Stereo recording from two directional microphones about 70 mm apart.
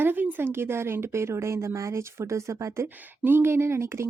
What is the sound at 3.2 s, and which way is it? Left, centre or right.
Speech, right.